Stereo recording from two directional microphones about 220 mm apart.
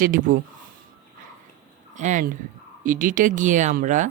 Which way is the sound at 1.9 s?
35° right (ahead or behind).